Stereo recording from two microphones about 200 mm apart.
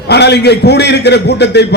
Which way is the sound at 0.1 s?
55° left (ahead or behind).